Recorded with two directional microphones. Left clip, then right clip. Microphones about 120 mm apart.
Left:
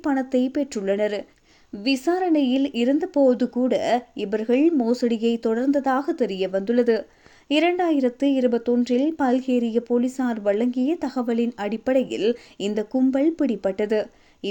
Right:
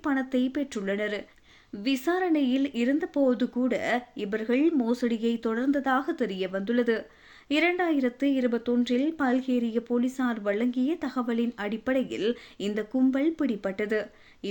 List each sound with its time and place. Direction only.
0.0 s speech: 25° left (ahead or behind)